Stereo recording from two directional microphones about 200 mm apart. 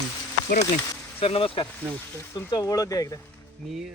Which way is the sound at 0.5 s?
40° left (ahead or behind).